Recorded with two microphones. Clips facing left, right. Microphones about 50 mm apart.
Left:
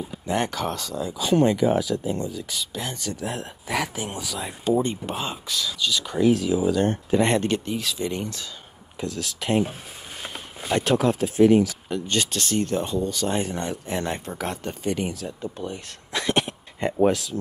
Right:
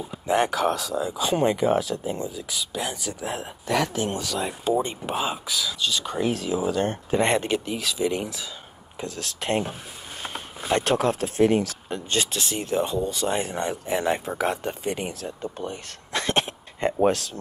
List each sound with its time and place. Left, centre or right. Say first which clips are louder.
0.3 s speech: right 4 dB; centre
1.0 s speech: left 3 dB; centre
3.6 s speech: right 4 dB; centre
4.6 s speech: left 3 dB; centre
6.0 s speech: left 7 dB; right
6.4 s speech: left 3 dB; right
6.7 s speech: left 3 dB; right
7.2 s speech: left 1 dB; centre
9.0 s speech: left 2 dB; right
10.8 s speech: left 3 dB; right
12.3 s speech: left 3 dB; centre
15.2 s speech: even; right